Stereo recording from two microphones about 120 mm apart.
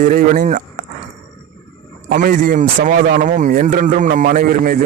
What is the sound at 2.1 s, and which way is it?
A man's voice, 90° right.